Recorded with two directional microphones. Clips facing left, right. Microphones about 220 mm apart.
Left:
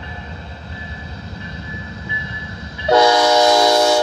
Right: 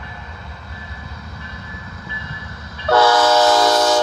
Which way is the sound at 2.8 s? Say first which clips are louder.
Left 1 dB; 15° left (ahead or behind).